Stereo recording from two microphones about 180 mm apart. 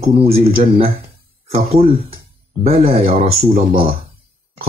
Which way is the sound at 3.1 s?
30° right (ahead or behind).